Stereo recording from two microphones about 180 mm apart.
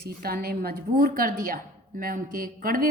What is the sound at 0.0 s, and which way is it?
A woman's voice, 60° right (ahead or behind).